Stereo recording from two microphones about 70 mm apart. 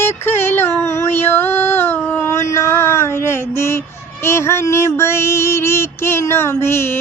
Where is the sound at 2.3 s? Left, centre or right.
Left.